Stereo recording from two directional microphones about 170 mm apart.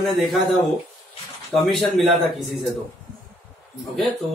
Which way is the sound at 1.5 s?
Centre (ahead or behind).